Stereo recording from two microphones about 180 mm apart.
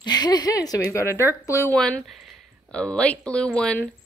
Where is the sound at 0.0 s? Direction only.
25° left (ahead or behind).